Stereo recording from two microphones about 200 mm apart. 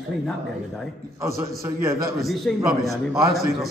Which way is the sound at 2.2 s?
Centre (ahead or behind).